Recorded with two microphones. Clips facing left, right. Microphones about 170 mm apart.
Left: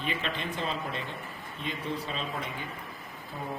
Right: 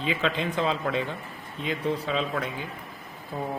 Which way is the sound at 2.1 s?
90° right.